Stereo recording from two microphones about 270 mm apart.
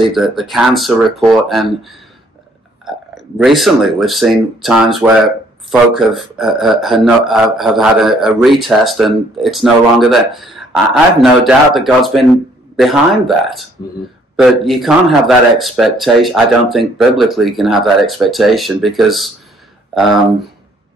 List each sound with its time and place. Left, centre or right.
0.1 s speech: centre
3.4 s speech: centre